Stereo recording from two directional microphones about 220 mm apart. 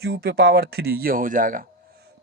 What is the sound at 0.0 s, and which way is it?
Speech, 50° right (ahead or behind).